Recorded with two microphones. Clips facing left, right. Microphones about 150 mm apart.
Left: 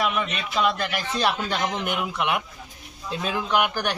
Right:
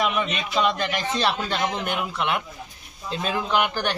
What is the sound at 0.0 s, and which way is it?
A man's voice, centre (ahead or behind).